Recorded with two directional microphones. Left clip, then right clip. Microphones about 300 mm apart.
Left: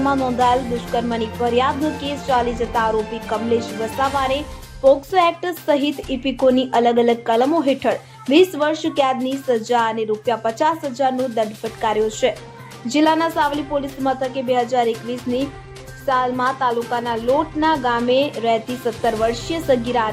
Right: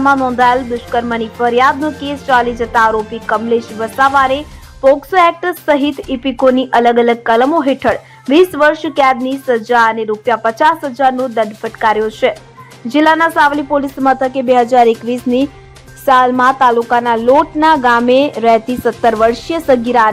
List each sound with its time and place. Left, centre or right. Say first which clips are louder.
0.0 s a woman's voice: right 7 dB; centre
13.7 s speech: right 8 dB; right